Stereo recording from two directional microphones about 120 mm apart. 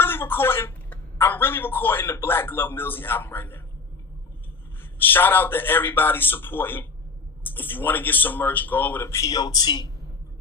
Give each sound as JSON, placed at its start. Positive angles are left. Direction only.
{"t": 0.0, "sound": "speech", "side_deg": 20}
{"t": 4.8, "sound": "speech", "side_deg": 15}